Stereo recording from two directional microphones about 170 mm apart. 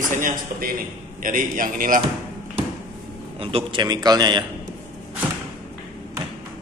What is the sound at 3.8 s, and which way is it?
Speech, 25° right (ahead or behind).